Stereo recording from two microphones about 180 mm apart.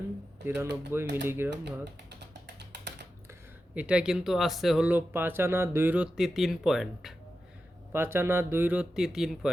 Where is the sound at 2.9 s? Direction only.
70° right (ahead or behind).